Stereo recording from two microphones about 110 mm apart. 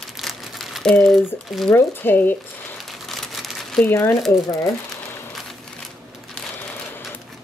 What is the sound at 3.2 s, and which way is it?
Crumpling, centre (ahead or behind).